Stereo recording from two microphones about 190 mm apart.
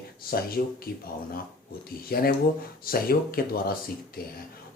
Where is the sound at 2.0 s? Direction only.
50° left (ahead or behind).